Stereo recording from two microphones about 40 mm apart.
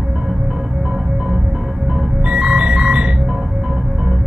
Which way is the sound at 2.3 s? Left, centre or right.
Right.